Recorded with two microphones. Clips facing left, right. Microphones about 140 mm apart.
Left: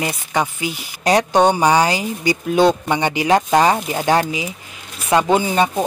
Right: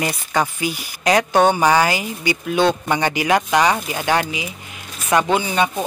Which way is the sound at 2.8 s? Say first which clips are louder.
Left 2 dB; 20° left (ahead or behind).